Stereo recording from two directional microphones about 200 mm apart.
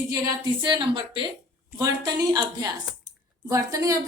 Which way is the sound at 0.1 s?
20° right (ahead or behind).